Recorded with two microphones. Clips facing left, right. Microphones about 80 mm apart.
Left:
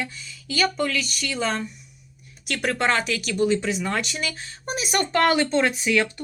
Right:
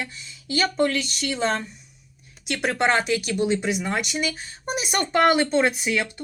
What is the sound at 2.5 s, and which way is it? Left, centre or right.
Speech, right.